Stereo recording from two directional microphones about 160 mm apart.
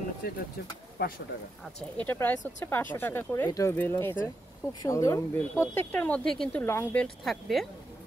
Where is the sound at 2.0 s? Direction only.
10° left (ahead or behind).